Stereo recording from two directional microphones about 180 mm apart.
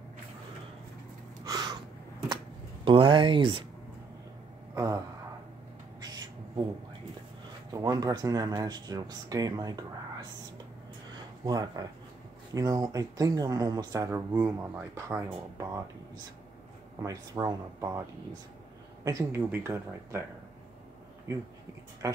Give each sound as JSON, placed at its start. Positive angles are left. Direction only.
{"t": 1.4, "sound": "a sound", "side_deg": -20}
{"t": 4.7, "sound": "speech", "side_deg": -20}
{"t": 7.7, "sound": "speech", "side_deg": -20}
{"t": 11.1, "sound": "a sound", "side_deg": -20}
{"t": 12.5, "sound": "speech", "side_deg": -20}
{"t": 17.0, "sound": "speech", "side_deg": -20}
{"t": 19.0, "sound": "speech", "side_deg": -15}
{"t": 22.0, "sound": "speech", "side_deg": -15}